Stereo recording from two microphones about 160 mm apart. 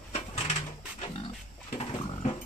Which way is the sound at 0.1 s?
35° left (ahead or behind).